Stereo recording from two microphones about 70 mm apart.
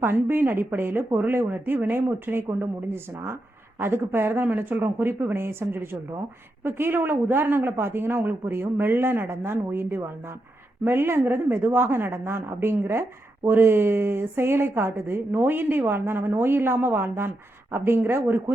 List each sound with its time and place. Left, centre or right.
0.0 s a woman's voice: right